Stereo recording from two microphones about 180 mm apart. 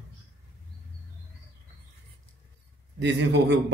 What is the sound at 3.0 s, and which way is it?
Speech, 75° right (ahead or behind).